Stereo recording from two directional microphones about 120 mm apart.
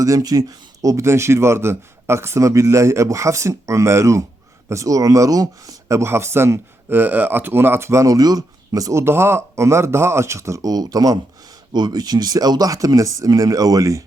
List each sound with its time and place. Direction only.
0.0 s speech: 30° right (ahead or behind)